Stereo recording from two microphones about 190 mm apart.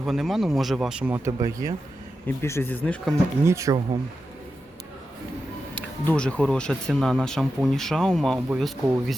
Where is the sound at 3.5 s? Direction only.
15° right (ahead or behind).